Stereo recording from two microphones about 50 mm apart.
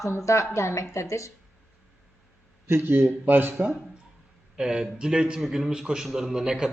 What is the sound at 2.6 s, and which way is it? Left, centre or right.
Speech, right.